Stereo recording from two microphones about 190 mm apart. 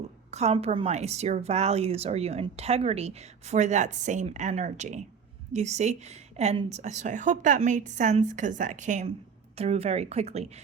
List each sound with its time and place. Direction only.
0.3 s a woman's voice: 35° right (ahead or behind)